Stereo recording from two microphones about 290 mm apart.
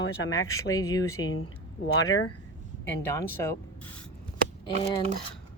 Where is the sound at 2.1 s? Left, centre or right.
Left.